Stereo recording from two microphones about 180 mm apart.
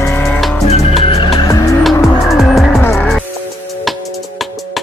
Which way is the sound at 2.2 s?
Centre (ahead or behind).